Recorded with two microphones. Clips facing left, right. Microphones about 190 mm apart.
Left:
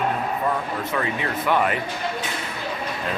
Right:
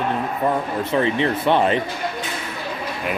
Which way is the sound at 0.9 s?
25° right (ahead or behind).